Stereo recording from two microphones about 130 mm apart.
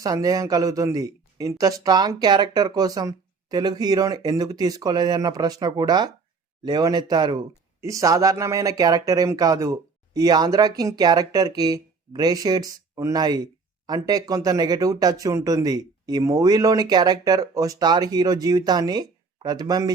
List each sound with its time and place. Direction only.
0.0 s speech: 25° right (ahead or behind)